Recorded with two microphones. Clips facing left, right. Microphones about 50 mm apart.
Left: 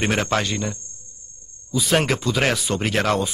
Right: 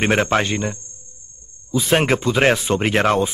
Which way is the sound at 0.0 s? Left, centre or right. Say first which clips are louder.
Right 4 dB; right.